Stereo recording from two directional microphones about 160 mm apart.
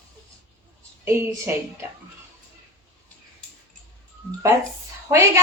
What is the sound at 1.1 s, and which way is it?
Speech, 15° right (ahead or behind).